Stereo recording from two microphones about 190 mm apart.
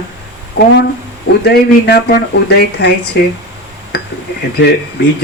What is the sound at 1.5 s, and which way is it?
Speech, 60° left (ahead or behind).